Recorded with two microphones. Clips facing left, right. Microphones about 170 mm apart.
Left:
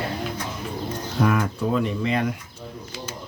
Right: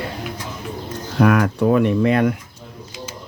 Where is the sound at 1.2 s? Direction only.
75° right (ahead or behind); by 2.3 s 55° right (ahead or behind).